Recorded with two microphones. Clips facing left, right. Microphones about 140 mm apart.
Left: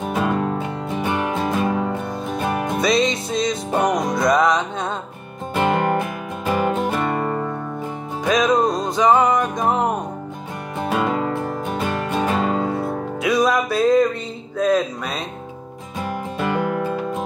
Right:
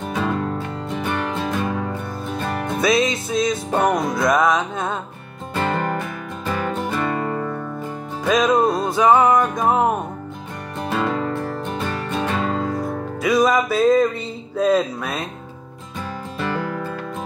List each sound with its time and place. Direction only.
0.0 s music: 10° left (ahead or behind)
2.8 s music: centre (ahead or behind)
5.5 s music: 15° left (ahead or behind)
7.0 s music: 35° left (ahead or behind)
8.3 s music: centre (ahead or behind)
10.9 s music: 15° left (ahead or behind)
12.6 s music: 25° left (ahead or behind)
13.2 s music: centre (ahead or behind)
14.6 s speech: 5° right (ahead or behind)
16.3 s music: 15° left (ahead or behind)